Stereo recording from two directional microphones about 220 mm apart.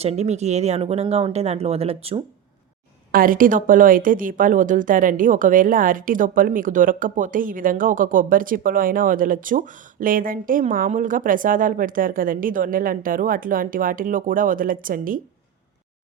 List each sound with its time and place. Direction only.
0.0 s speech: 30° right (ahead or behind)
3.1 s speech: 40° right (ahead or behind)